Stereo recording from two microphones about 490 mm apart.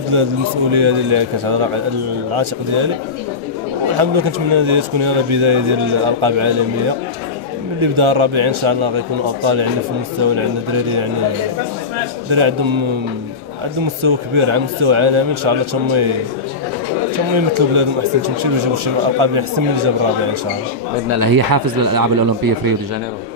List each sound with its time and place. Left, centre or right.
0.1 s speech: right
3.9 s speech: right
7.8 s speech: right
12.3 s speech: right
13.8 s speech: right
17.6 s speech: right
21.2 s speech: right